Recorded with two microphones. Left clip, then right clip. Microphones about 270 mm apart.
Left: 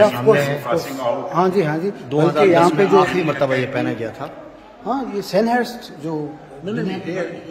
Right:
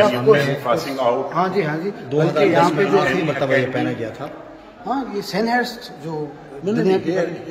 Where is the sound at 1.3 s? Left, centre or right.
Left.